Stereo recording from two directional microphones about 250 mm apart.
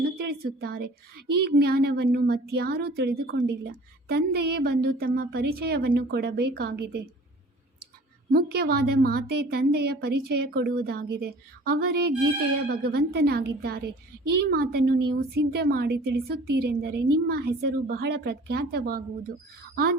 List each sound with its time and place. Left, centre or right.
0.2 s a woman's voice: right
8.3 s a woman's voice: right